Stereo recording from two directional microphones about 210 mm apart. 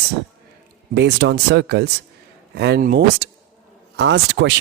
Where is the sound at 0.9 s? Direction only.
55° right (ahead or behind).